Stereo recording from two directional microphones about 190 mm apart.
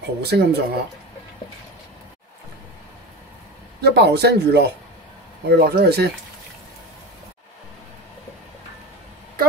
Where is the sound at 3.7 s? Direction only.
60° right (ahead or behind).